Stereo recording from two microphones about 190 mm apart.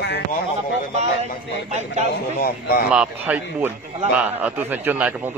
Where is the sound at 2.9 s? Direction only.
5° right (ahead or behind).